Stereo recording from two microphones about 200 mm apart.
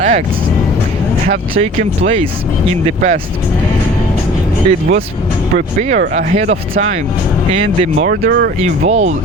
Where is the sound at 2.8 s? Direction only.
35° right (ahead or behind).